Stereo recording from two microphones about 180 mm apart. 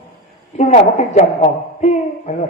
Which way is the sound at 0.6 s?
35° left (ahead or behind).